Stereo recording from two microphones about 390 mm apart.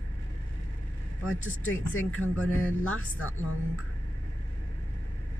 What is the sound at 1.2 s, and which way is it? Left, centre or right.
Speech, left.